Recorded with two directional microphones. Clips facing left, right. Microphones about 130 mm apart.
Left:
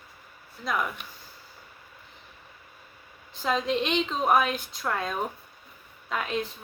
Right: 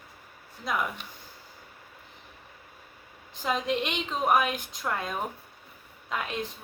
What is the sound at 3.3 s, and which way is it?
A woman's voice, 15° right (ahead or behind).